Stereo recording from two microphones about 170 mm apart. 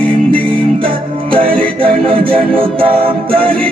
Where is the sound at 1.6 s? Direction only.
30° right (ahead or behind).